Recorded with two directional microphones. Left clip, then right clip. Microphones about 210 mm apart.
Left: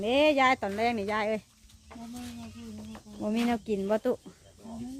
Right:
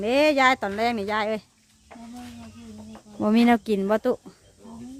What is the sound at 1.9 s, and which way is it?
Speech, 55° left (ahead or behind).